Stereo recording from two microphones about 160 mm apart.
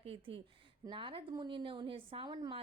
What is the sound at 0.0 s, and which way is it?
A woman's voice, 35° right (ahead or behind).